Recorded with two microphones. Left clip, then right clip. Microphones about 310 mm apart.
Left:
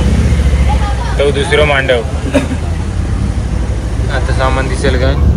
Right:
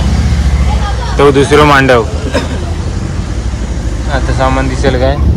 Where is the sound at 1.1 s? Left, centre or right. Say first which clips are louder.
Right 5 dB; right.